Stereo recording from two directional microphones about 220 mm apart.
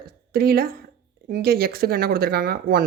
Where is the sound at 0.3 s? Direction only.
45° right (ahead or behind).